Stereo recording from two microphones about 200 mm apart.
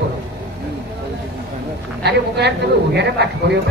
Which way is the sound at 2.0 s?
55° right (ahead or behind).